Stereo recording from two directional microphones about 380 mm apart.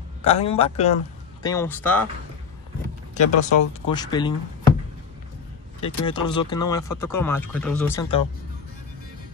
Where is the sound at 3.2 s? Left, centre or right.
Left.